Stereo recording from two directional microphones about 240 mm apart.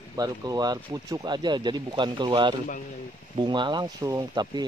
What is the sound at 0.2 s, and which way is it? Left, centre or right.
Speech, centre.